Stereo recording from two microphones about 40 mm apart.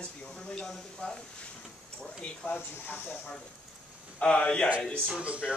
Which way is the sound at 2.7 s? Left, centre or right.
Left.